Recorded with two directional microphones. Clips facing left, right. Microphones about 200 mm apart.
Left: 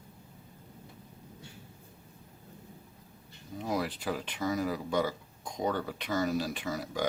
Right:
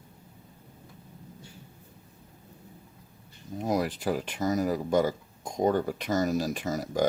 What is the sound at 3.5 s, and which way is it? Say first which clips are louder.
Speech: right 5 dB; 45° right (ahead or behind).